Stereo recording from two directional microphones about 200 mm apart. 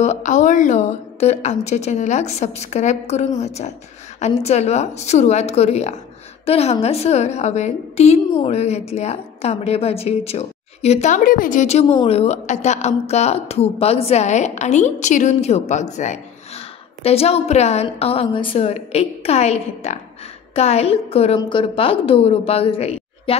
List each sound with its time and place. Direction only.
0.0 s a woman's voice: 35° left (ahead or behind)